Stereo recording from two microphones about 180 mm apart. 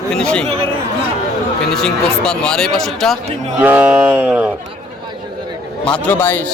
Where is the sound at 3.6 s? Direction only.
10° right (ahead or behind).